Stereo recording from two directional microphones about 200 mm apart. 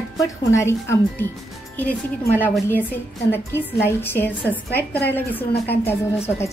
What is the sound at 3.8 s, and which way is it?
Speech, 10° left (ahead or behind).